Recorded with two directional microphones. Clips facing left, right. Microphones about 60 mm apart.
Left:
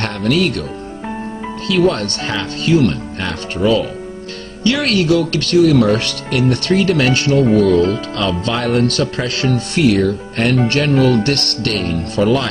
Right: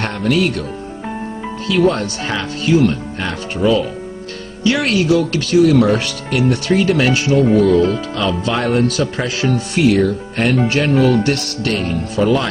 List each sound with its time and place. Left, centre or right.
2.2 s speech: centre
4.9 s speech: left
6.0 s speech: centre
8.2 s speech: right
11.2 s speech: left